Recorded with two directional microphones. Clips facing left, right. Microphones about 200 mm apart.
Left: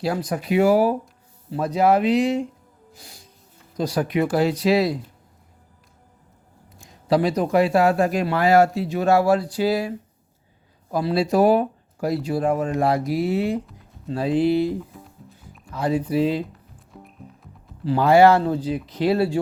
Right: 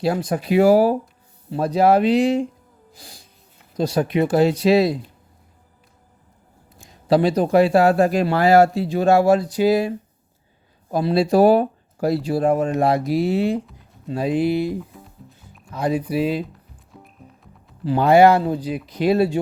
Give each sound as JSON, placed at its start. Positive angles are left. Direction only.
{"t": 0.0, "sound": "speech", "side_deg": -25}
{"t": 3.8, "sound": "speech", "side_deg": -25}
{"t": 7.1, "sound": "speech", "side_deg": -30}
{"t": 10.9, "sound": "speech", "side_deg": -25}
{"t": 14.1, "sound": "speech", "side_deg": -15}
{"t": 17.8, "sound": "speech", "side_deg": -20}